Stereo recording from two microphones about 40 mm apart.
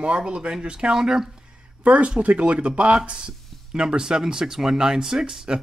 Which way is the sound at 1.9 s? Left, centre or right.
Right.